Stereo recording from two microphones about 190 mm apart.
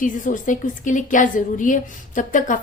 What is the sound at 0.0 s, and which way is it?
A woman's voice, 45° left (ahead or behind).